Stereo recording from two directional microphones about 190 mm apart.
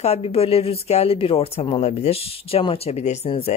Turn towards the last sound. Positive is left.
turn(degrees=30)  # may be behind; listen again after turning